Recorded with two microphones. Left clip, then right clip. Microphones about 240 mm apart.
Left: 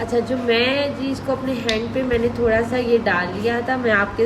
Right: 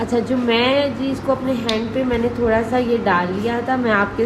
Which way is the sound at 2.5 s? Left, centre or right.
Centre.